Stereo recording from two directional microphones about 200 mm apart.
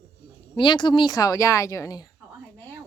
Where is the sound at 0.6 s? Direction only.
25° left (ahead or behind).